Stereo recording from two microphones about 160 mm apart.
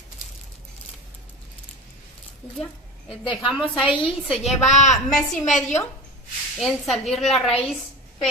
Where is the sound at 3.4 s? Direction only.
5° right (ahead or behind).